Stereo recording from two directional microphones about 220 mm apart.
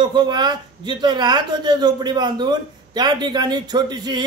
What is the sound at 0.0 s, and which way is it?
Speech, 20° right (ahead or behind).